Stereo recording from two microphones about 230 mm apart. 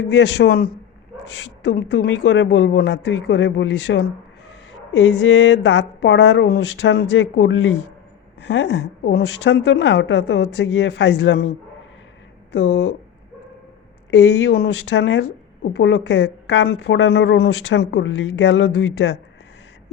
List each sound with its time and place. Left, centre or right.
0.1 s a woman's voice: left
12.5 s a woman's voice: left
14.2 s a woman's voice: left